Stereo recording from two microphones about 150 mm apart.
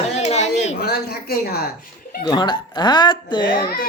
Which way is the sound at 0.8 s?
90° left.